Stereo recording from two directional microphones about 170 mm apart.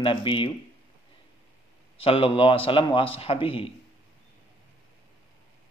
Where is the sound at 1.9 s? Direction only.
35° left (ahead or behind).